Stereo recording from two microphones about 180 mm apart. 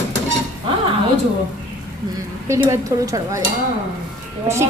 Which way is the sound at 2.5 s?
15° right (ahead or behind).